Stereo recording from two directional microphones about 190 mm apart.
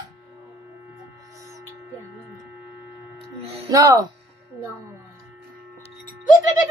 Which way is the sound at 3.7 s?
20° right (ahead or behind).